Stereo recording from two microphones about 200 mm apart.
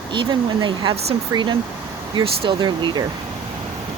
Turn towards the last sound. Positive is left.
turn(degrees=-25)  # may be behind; listen again after turning